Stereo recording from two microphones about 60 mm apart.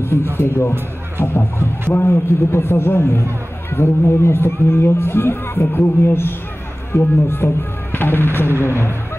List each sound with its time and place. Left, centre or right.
0.0 s music: left
0.4 s a man's voice: left